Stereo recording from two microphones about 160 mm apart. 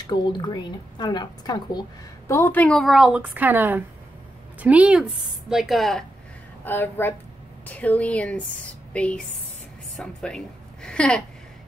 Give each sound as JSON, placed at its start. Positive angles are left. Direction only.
{"t": 0.0, "sound": "a woman's voice", "side_deg": 25}
{"t": 6.6, "sound": "a woman's voice", "side_deg": 15}